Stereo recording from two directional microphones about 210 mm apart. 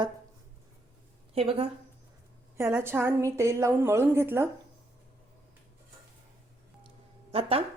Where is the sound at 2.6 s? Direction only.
10° right (ahead or behind).